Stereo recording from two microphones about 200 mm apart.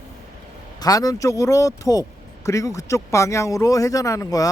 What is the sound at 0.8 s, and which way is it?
Speech, 20° left (ahead or behind).